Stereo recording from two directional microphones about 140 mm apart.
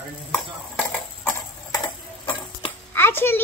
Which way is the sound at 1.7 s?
35° left (ahead or behind).